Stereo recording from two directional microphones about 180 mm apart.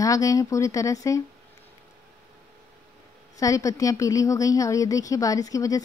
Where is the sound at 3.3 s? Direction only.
20° left (ahead or behind).